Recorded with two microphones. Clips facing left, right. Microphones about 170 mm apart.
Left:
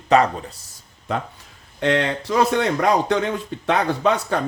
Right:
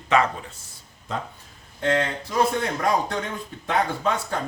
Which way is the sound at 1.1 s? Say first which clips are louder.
Left 5 dB; 65° left (ahead or behind).